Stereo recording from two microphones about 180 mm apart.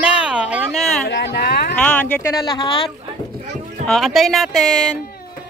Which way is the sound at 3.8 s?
Centre (ahead or behind).